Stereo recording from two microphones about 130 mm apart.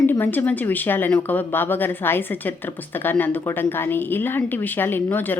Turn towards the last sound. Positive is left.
turn(degrees=15)  # may be behind; listen again after turning